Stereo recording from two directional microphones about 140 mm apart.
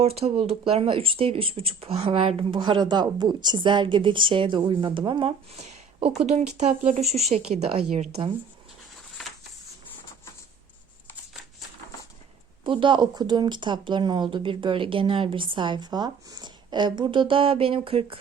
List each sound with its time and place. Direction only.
0.0 s speech: 45° right (ahead or behind)
5.5 s speech: 45° right (ahead or behind)
12.6 s speech: 35° right (ahead or behind)